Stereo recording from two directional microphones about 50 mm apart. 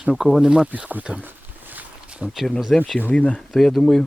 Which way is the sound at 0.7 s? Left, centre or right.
Right.